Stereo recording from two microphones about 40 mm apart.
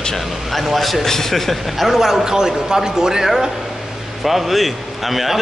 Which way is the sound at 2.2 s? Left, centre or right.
Centre.